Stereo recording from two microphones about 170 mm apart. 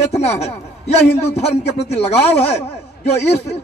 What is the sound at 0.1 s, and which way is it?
A man's voice, 40° left (ahead or behind).